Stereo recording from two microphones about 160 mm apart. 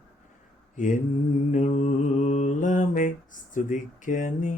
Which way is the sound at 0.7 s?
55° left (ahead or behind).